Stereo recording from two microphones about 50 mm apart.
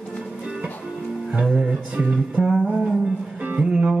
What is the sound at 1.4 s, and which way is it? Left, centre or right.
Music, centre.